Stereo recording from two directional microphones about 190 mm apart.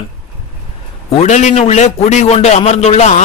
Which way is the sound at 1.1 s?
40° left (ahead or behind).